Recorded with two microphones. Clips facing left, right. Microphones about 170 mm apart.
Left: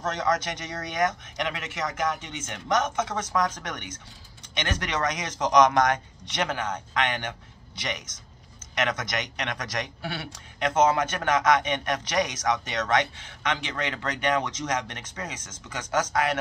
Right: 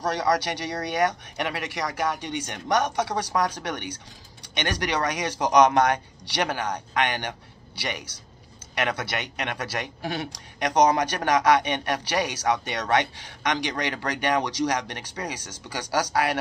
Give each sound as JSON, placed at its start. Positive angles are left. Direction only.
{"t": 0.0, "sound": "speech", "side_deg": -35}